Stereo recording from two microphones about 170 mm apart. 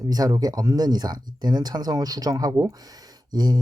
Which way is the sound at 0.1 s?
20° right (ahead or behind).